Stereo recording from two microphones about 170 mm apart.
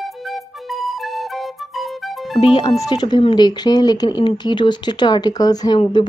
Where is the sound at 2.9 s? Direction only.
25° left (ahead or behind).